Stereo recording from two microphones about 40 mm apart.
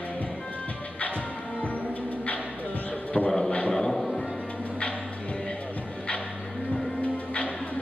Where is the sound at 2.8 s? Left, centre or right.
Left.